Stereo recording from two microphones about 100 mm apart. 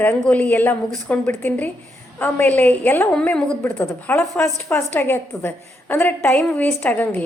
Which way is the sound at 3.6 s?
20° left (ahead or behind).